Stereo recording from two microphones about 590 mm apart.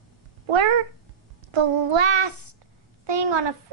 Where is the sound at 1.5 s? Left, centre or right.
Right.